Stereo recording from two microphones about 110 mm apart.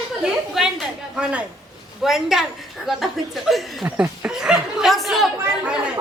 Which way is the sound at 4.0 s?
10° right (ahead or behind).